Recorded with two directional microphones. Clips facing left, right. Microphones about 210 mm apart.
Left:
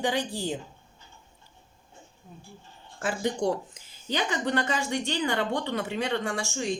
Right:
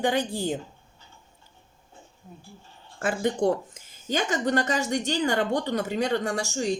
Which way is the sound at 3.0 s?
55° right (ahead or behind).